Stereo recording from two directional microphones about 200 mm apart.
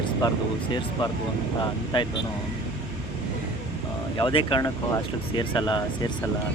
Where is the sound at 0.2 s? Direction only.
20° left (ahead or behind).